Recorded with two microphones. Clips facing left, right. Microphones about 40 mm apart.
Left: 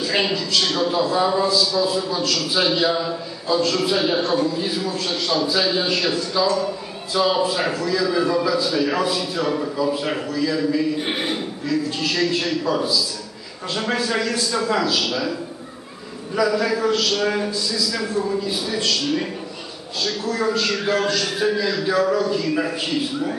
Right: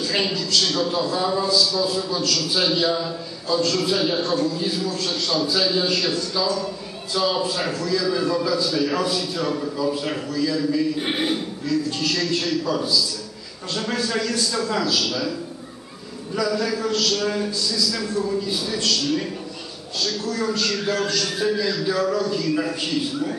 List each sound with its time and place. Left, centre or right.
0.0 s a man's voice: centre
16.3 s a man's voice: centre